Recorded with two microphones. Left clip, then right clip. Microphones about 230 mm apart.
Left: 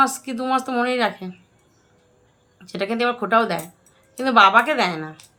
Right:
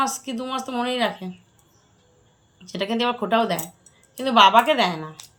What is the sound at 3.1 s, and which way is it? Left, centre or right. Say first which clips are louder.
Speech: left 1 dB; left.